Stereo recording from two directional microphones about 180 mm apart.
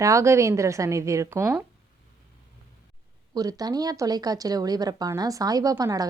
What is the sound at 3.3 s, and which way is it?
Speech, 20° right (ahead or behind).